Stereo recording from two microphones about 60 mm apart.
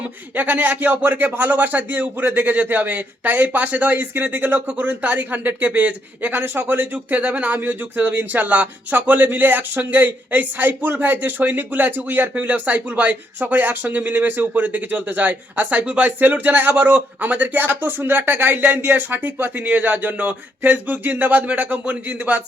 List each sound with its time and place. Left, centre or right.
0.3 s a man's voice: right